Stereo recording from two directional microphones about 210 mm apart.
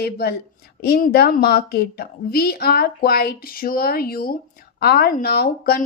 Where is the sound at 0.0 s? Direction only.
50° left (ahead or behind).